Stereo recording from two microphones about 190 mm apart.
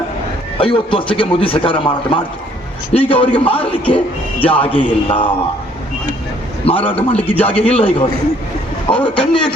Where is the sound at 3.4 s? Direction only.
5° left (ahead or behind).